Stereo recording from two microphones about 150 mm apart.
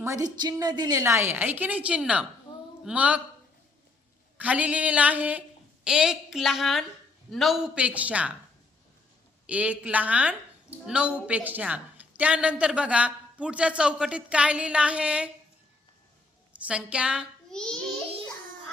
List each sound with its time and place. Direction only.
0.0 s a woman's voice: 25° right (ahead or behind); by 2.2 s 10° right (ahead or behind)
2.5 s a sound: 30° left (ahead or behind)
2.8 s a woman's voice: 10° right (ahead or behind)
4.4 s a woman's voice: 10° right (ahead or behind)
9.5 s a woman's voice: 10° right (ahead or behind)
16.5 s a woman's voice: 10° right (ahead or behind)
17.5 s a woman's voice: 5° left (ahead or behind)